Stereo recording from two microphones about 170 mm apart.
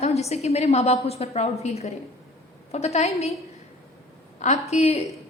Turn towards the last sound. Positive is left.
turn(degrees=40)  # may be behind; listen again after turning